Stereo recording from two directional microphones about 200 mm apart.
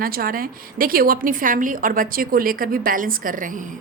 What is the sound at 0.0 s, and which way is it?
A woman's voice, 45° right (ahead or behind).